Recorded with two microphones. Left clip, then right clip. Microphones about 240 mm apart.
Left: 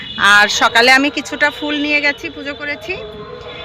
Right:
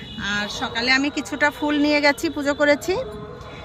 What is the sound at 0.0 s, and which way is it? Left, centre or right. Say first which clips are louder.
Speech: left 16 dB; centre.